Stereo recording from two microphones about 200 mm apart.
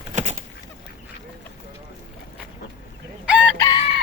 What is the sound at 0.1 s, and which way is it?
Goose, 35° right (ahead or behind).